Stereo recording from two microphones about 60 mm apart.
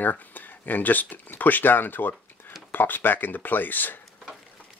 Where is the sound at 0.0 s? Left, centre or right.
Left.